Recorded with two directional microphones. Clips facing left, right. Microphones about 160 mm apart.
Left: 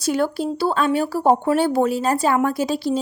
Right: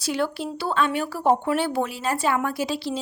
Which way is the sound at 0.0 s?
45° left (ahead or behind).